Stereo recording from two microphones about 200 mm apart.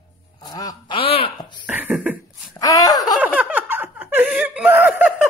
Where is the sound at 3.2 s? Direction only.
10° right (ahead or behind).